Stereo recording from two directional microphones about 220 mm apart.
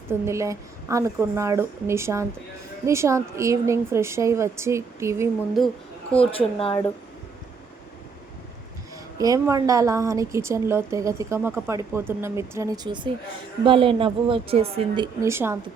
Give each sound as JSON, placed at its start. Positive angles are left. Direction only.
{"t": 0.1, "sound": "a woman's voice", "side_deg": -15}
{"t": 5.6, "sound": "a woman's voice", "side_deg": 0}
{"t": 6.1, "sound": "speech", "side_deg": 25}
{"t": 9.1, "sound": "a woman's voice", "side_deg": -15}